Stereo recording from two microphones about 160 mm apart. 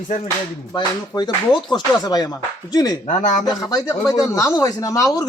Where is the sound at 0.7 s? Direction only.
30° left (ahead or behind).